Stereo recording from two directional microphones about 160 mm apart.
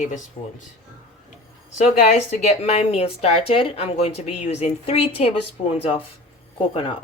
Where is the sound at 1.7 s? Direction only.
45° left (ahead or behind).